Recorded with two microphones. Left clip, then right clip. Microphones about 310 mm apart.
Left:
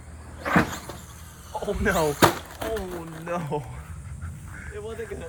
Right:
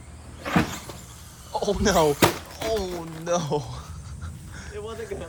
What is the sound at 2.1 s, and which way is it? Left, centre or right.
Speech, centre.